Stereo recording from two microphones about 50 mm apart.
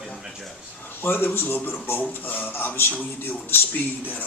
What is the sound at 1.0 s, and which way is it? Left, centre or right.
Speech, left.